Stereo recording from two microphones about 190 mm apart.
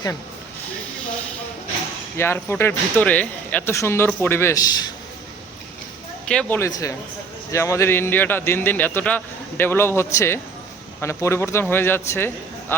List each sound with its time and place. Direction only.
2.1 s a man's voice: 10° left (ahead or behind)
6.2 s a man's voice: 5° left (ahead or behind)
6.7 s a man's voice: 20° left (ahead or behind)